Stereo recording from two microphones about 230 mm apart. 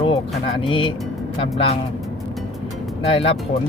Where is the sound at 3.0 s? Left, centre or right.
Left.